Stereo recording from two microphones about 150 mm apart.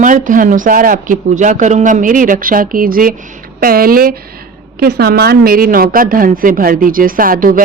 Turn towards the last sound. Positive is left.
turn(degrees=-70)  # may be behind; listen again after turning